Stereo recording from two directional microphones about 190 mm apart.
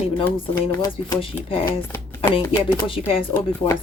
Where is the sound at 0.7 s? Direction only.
20° left (ahead or behind).